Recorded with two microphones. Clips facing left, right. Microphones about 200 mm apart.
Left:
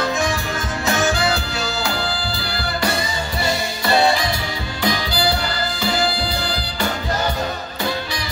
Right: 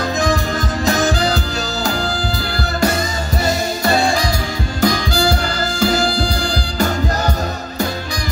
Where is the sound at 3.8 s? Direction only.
45° right (ahead or behind).